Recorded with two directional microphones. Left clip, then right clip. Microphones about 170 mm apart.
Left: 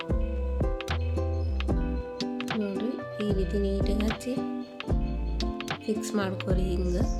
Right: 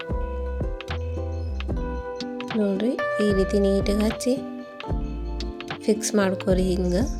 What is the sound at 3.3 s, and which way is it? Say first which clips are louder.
Speech: right 6 dB; 40° right (ahead or behind).